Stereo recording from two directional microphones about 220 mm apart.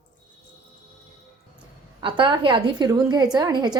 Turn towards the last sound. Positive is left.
turn(degrees=-20)  # may be behind; listen again after turning